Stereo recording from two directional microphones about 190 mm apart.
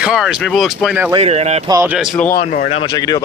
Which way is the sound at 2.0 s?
Centre (ahead or behind).